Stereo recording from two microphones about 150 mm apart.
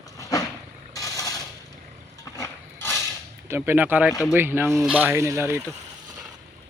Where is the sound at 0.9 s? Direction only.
20° left (ahead or behind).